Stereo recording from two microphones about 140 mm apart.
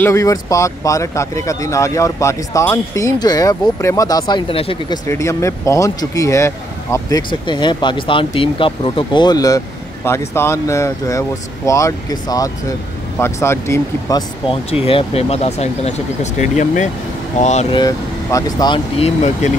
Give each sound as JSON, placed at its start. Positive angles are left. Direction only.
{"t": 0.0, "sound": "speech", "side_deg": 20}
{"t": 5.1, "sound": "speech", "side_deg": 20}
{"t": 14.5, "sound": "speech", "side_deg": 45}
{"t": 17.6, "sound": "speech", "side_deg": 30}
{"t": 18.9, "sound": "speech", "side_deg": 50}